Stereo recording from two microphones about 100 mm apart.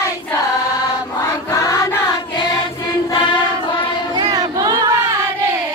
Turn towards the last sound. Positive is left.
turn(degrees=-35)  # may be behind; listen again after turning